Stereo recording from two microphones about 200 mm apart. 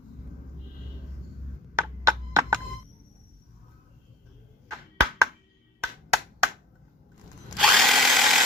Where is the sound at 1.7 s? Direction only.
15° right (ahead or behind).